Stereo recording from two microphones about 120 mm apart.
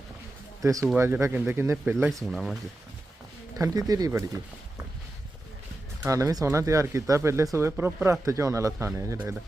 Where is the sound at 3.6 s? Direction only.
30° right (ahead or behind).